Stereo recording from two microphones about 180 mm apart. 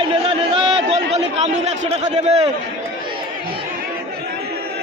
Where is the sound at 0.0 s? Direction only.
30° right (ahead or behind).